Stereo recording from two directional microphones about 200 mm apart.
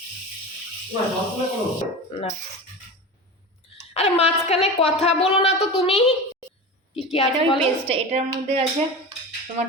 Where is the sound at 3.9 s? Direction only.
30° left (ahead or behind).